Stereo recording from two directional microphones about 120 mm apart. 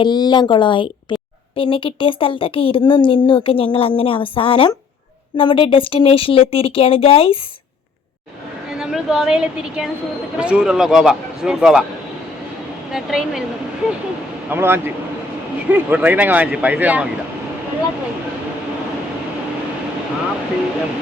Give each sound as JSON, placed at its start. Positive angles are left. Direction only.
{"t": 0.0, "sound": "a woman's voice", "side_deg": 40}
{"t": 8.8, "sound": "a woman's voice", "side_deg": -5}
{"t": 12.9, "sound": "a man's voice", "side_deg": -5}
{"t": 14.5, "sound": "speech", "side_deg": -20}